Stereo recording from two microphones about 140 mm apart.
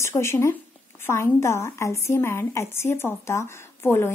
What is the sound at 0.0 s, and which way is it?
A woman's voice, 20° left (ahead or behind).